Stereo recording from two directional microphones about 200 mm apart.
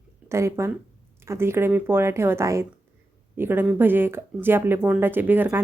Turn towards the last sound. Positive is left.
turn(degrees=-10)  # may be behind; listen again after turning